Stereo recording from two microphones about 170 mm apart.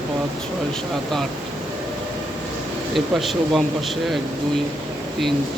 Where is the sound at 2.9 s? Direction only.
Centre (ahead or behind).